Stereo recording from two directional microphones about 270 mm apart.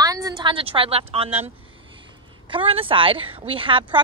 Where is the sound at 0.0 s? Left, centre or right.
Centre.